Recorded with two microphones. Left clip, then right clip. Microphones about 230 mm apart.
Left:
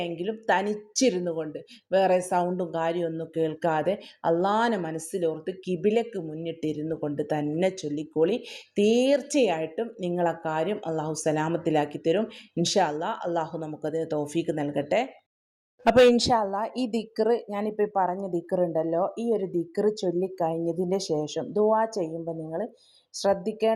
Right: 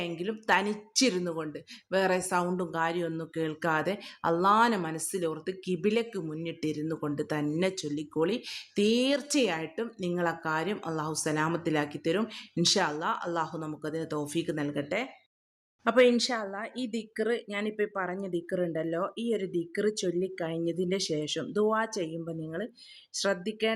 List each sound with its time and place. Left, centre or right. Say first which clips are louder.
0.0 s a woman's voice: left 4 dB; centre